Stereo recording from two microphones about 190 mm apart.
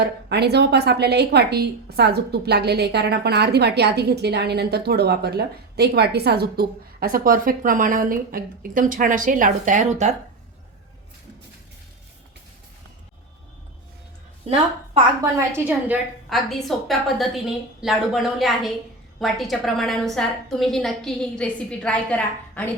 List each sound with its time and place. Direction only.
0.0 s a woman's voice: 60° right (ahead or behind); by 10.2 s 40° right (ahead or behind)
14.5 s a woman's voice: 35° right (ahead or behind)
15.2 s a woman's voice: 15° right (ahead or behind); by 22.7 s 10° left (ahead or behind)